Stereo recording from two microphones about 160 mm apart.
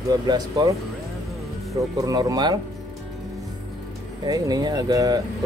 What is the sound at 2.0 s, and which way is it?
Speech, 20° right (ahead or behind).